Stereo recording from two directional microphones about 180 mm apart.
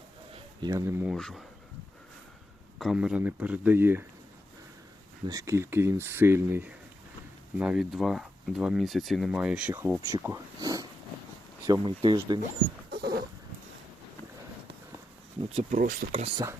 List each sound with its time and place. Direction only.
0.3 s a sound: 25° right (ahead or behind)
0.9 s speech: 15° right (ahead or behind)
1.1 s speech: centre (ahead or behind)
2.7 s speech: centre (ahead or behind)
5.2 s speech: 20° right (ahead or behind)
7.6 s speech: 5° right (ahead or behind); by 12.4 s 25° right (ahead or behind)
12.9 s dog: 65° right (ahead or behind)
15.5 s speech: 50° right (ahead or behind)